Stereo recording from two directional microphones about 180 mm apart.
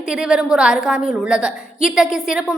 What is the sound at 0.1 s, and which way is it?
A woman's voice, 5° right (ahead or behind).